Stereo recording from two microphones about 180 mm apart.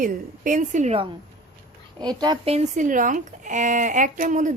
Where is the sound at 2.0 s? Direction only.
25° right (ahead or behind).